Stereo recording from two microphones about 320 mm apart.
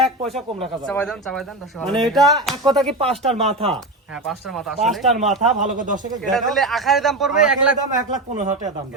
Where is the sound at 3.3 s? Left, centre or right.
Centre.